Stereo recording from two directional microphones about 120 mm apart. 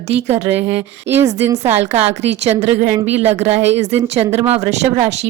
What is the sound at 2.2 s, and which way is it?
Speech, 65° right (ahead or behind).